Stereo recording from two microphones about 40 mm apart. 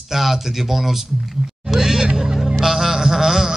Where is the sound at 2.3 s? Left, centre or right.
Centre.